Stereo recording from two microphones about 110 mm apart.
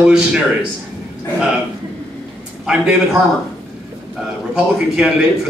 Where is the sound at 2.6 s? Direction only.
5° right (ahead or behind).